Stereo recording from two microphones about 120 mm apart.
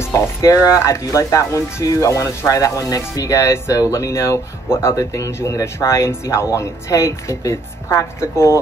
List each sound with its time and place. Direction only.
0.0 s speech: 25° left (ahead or behind)